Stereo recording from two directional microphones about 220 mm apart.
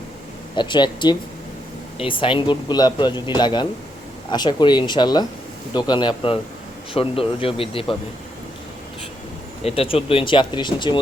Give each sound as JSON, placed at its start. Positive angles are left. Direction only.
{"t": 0.5, "sound": "a man's voice", "side_deg": 20}
{"t": 9.6, "sound": "a man's voice", "side_deg": 25}